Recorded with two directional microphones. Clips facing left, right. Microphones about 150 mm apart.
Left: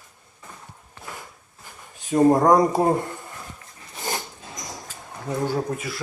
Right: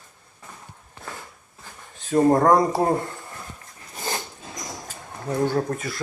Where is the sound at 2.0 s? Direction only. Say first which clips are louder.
Left 1 dB; 15° left (ahead or behind).